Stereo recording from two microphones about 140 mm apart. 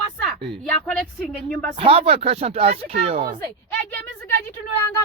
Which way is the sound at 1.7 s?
45° right (ahead or behind).